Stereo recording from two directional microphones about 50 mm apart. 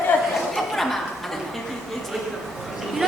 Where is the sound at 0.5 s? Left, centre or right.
Centre.